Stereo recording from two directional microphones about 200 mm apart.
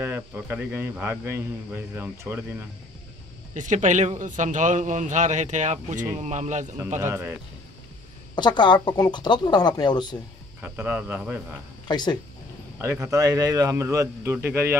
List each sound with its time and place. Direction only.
0.0 s speech: 10° right (ahead or behind)
3.5 s a man's voice: 40° right (ahead or behind)
7.0 s speech: 10° right (ahead or behind)
8.4 s speech: 20° left (ahead or behind)
10.6 s speech: 10° right (ahead or behind)
11.9 s speech: 20° left (ahead or behind)
12.8 s speech: 15° right (ahead or behind)